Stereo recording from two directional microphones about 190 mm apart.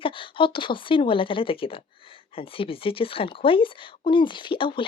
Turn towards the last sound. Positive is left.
turn(degrees=25)  # may be behind; listen again after turning